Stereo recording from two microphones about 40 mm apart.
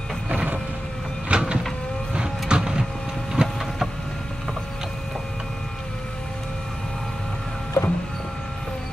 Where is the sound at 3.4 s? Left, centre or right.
Right.